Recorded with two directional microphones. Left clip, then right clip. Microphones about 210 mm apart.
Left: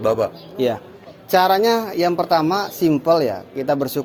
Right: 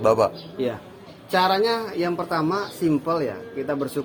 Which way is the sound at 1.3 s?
60° left (ahead or behind).